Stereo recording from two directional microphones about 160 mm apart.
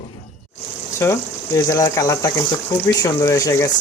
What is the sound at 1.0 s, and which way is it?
Speech, 15° left (ahead or behind).